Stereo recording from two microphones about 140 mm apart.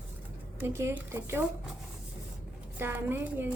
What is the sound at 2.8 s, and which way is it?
Speech, 15° right (ahead or behind).